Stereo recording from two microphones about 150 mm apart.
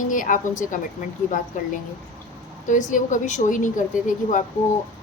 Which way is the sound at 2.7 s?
55° left (ahead or behind).